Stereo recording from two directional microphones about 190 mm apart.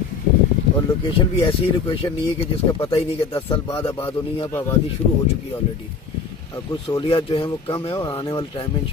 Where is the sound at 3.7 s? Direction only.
30° left (ahead or behind).